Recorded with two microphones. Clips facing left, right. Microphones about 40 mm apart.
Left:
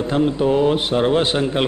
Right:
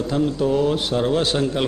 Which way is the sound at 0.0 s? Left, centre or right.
Left.